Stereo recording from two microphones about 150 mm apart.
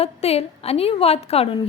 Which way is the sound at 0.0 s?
40° left (ahead or behind).